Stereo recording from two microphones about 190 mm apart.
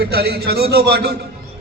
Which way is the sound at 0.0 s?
55° right (ahead or behind).